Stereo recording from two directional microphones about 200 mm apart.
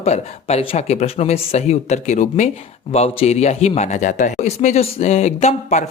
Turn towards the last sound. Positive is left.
turn(degrees=35)  # may be behind; listen again after turning